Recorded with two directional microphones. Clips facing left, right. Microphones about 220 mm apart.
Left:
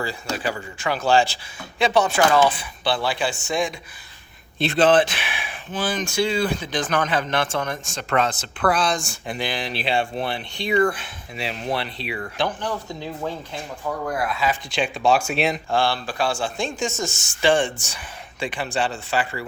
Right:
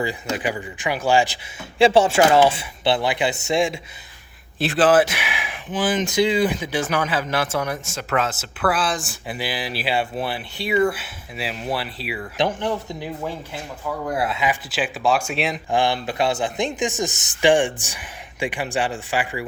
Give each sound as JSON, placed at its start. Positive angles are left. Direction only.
{"t": 0.0, "sound": "speech", "side_deg": -20}
{"t": 1.8, "sound": "speech", "side_deg": -30}
{"t": 4.5, "sound": "speech", "side_deg": -5}
{"t": 12.4, "sound": "speech", "side_deg": -25}
{"t": 14.1, "sound": "speech", "side_deg": -25}
{"t": 14.7, "sound": "speech", "side_deg": -5}
{"t": 15.7, "sound": "speech", "side_deg": -20}